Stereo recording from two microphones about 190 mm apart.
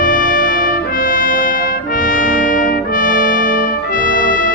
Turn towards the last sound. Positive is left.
turn(degrees=45)  # may be behind; listen again after turning